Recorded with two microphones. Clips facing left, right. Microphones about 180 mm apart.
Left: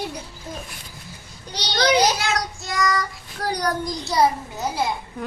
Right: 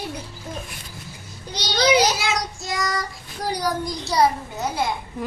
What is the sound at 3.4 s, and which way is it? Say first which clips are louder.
Speech: left 1 dB; 10° right (ahead or behind).